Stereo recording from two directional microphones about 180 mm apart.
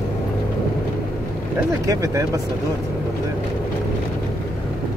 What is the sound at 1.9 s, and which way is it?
Speech, 15° right (ahead or behind).